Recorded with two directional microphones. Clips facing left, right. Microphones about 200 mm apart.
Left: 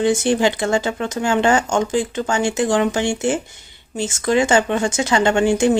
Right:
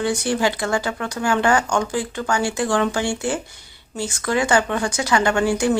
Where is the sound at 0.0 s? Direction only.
25° left (ahead or behind).